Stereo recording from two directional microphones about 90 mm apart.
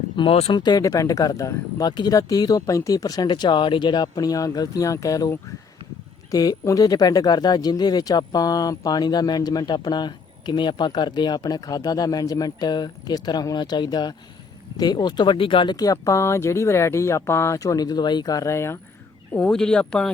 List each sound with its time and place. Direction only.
0.2 s speech: 75° left (ahead or behind)
0.6 s speech: 45° left (ahead or behind)
1.9 s speech: 60° left (ahead or behind)
2.1 s speech: 45° left (ahead or behind)
6.3 s speech: 45° left (ahead or behind); by 15.7 s 75° left (ahead or behind)
15.7 s speech: 45° left (ahead or behind)
19.3 s speech: 10° left (ahead or behind)